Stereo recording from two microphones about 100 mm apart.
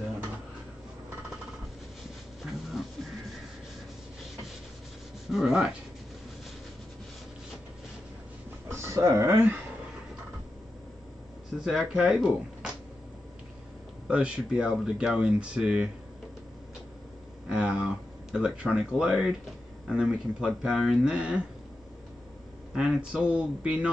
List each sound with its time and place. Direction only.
5.3 s speech: 5° right (ahead or behind)
8.6 s speech: 30° right (ahead or behind)
11.6 s speech: centre (ahead or behind)
14.0 s speech: 10° right (ahead or behind)
17.5 s a sound: 10° right (ahead or behind)
19.9 s speech: 5° right (ahead or behind)
22.7 s speech: 10° right (ahead or behind)